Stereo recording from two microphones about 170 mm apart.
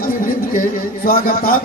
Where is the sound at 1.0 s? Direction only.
60° left (ahead or behind).